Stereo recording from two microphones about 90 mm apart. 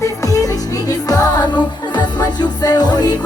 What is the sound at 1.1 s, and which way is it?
Music, 45° left (ahead or behind).